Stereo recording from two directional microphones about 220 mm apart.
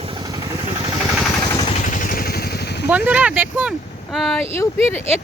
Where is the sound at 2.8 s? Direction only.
10° right (ahead or behind).